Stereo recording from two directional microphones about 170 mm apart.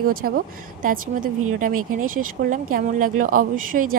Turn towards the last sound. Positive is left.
turn(degrees=-55)  # may be behind; listen again after turning